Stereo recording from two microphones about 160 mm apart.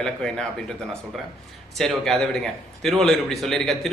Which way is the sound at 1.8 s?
Centre (ahead or behind).